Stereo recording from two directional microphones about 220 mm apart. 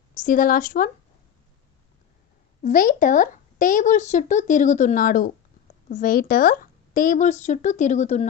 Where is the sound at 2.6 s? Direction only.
35° left (ahead or behind).